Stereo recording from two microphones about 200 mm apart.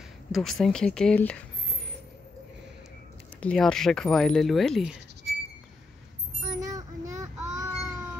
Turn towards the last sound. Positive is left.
turn(degrees=-15)  # may be behind; listen again after turning